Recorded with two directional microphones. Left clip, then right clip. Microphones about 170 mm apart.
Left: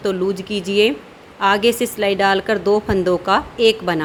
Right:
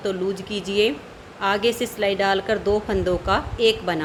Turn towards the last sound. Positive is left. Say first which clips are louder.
# left 4 dB
turn(degrees=30)  # may be behind; listen again after turning